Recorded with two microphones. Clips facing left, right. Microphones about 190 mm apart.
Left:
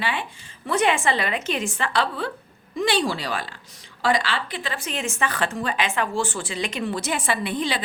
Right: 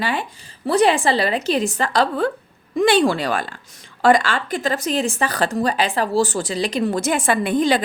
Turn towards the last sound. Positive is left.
turn(degrees=-45)  # may be behind; listen again after turning